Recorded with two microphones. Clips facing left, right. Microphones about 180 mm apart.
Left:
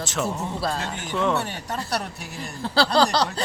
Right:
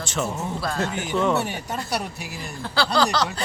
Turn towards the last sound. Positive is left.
turn(degrees=35)  # may be behind; listen again after turning